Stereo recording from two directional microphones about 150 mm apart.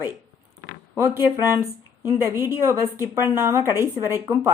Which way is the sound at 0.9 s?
15° right (ahead or behind).